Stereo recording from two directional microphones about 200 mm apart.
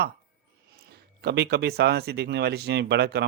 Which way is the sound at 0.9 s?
55° right (ahead or behind).